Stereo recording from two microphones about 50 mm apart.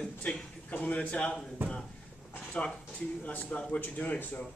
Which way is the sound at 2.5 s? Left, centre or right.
Left.